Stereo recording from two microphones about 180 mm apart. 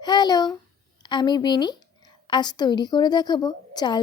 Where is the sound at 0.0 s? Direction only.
25° left (ahead or behind).